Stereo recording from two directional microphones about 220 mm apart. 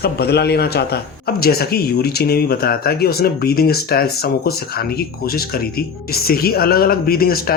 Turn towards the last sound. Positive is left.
turn(degrees=45)  # may be behind; listen again after turning